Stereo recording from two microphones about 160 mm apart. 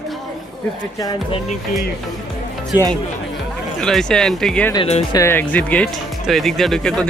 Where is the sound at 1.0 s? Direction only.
25° left (ahead or behind).